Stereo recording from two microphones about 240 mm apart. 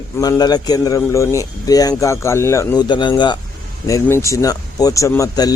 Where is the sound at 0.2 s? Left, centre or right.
Centre.